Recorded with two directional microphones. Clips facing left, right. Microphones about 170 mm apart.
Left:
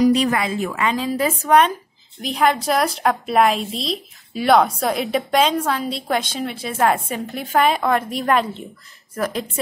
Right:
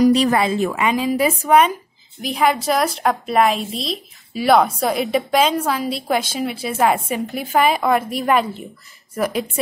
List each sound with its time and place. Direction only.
0.1 s a woman's voice: 30° right (ahead or behind)
0.7 s a woman's voice: 15° right (ahead or behind)